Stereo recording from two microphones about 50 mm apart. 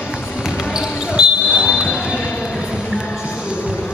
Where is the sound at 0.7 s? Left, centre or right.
Centre.